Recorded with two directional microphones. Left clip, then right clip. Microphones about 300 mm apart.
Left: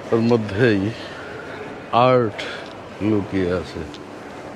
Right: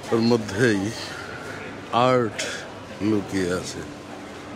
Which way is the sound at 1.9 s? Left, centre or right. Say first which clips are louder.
Left 4 dB; right.